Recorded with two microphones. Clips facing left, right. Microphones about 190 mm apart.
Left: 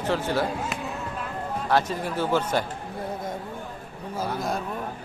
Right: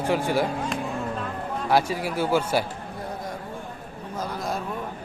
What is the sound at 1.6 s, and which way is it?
A man's voice, 10° right (ahead or behind).